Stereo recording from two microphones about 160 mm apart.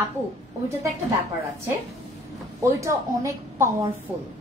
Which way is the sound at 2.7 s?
20° right (ahead or behind).